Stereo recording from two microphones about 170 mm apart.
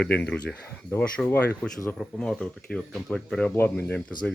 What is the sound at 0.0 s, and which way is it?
Speech, 5° left (ahead or behind).